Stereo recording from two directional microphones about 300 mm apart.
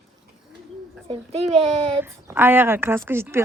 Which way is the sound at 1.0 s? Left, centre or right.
Centre.